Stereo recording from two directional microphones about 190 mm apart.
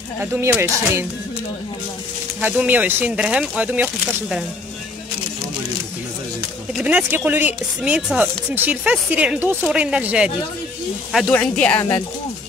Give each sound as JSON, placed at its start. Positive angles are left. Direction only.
{"t": 0.2, "sound": "speech", "side_deg": -10}
{"t": 2.4, "sound": "speech", "side_deg": -10}
{"t": 6.8, "sound": "speech", "side_deg": -10}